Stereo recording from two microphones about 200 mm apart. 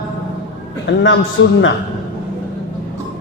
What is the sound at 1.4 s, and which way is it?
Speech, 65° left (ahead or behind).